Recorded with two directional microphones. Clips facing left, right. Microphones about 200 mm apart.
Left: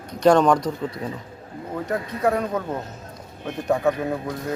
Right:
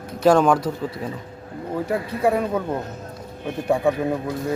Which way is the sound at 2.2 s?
10° right (ahead or behind).